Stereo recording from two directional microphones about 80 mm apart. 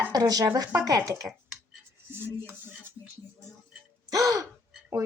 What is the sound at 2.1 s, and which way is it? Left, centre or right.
Music, right.